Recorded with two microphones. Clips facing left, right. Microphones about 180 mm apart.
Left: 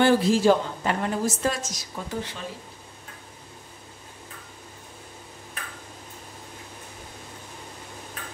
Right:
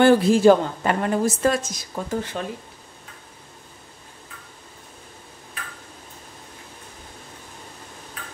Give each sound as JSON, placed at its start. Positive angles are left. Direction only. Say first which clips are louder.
{"t": 0.0, "sound": "a woman's voice", "louder": "right 5 dB", "side_deg": -55}